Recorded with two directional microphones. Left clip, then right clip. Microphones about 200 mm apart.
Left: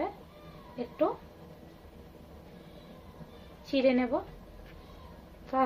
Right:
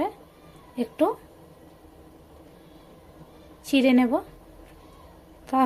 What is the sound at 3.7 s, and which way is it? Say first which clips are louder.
Speech: right 6 dB; 55° right (ahead or behind).